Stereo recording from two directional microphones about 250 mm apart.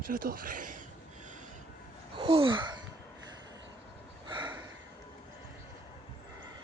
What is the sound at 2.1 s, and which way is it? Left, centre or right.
Gasp, right.